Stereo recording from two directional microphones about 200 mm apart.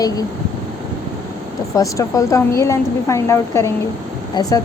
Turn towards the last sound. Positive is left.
turn(degrees=20)  # may be behind; listen again after turning